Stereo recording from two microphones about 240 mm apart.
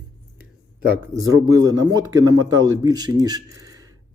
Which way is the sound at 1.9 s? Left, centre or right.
Centre.